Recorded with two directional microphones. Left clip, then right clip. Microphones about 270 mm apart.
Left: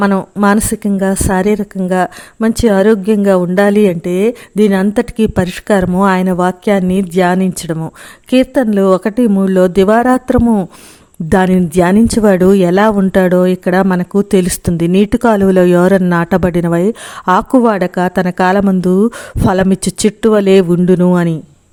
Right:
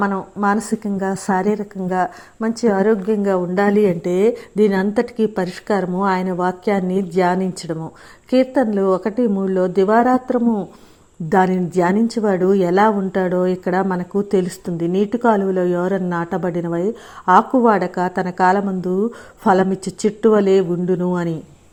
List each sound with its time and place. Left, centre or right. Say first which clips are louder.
0.0 s a woman's voice: left 7 dB; left
19.0 s a woman's voice: left 3 dB; left